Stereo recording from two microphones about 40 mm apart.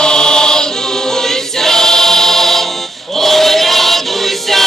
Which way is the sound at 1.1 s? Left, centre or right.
Centre.